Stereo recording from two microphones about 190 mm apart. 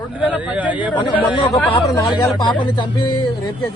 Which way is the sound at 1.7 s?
20° left (ahead or behind).